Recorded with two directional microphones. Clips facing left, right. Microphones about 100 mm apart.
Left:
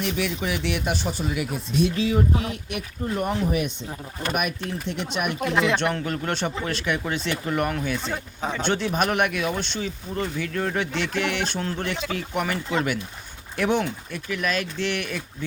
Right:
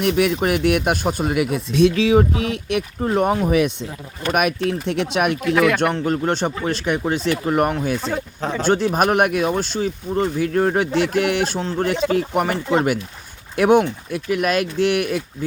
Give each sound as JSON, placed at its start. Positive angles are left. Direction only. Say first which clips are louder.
{"t": 0.0, "sound": "speech", "louder": "right 8 dB", "side_deg": -60}
{"t": 4.3, "sound": "speech", "louder": "right 8 dB", "side_deg": -75}
{"t": 5.5, "sound": "speech", "louder": "right 5 dB", "side_deg": 25}
{"t": 5.9, "sound": "speech", "louder": "right 7 dB", "side_deg": -30}
{"t": 8.1, "sound": "speech", "louder": "right 5 dB", "side_deg": 0}
{"t": 8.6, "sound": "speech", "louder": "right 7 dB", "side_deg": -40}